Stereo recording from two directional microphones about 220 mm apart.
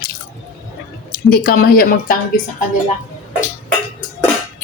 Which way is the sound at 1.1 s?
45° left (ahead or behind).